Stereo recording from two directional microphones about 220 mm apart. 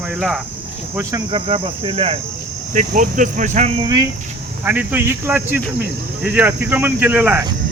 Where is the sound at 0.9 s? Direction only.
15° right (ahead or behind).